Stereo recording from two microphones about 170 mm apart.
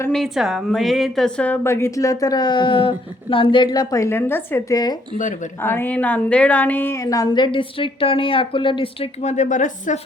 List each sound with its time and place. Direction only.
0.1 s a woman's voice: centre (ahead or behind); by 10.0 s 50° left (ahead or behind)